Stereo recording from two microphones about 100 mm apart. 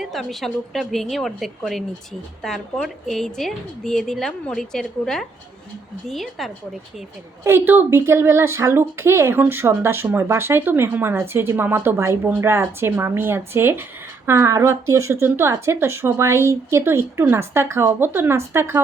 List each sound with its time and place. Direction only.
0.0 s a woman's voice: centre (ahead or behind)
7.4 s a woman's voice: 20° right (ahead or behind)